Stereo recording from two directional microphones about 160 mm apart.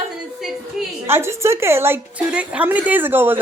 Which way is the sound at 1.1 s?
15° right (ahead or behind).